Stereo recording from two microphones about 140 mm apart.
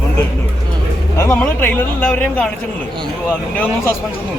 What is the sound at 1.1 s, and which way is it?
Speech, 15° left (ahead or behind).